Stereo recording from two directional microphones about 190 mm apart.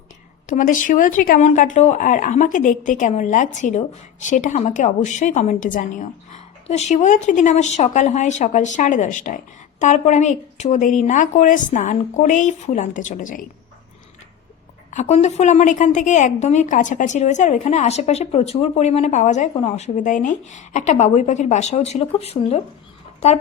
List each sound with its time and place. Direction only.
0.4 s speech: 45° left (ahead or behind)
14.8 s speech: 35° left (ahead or behind)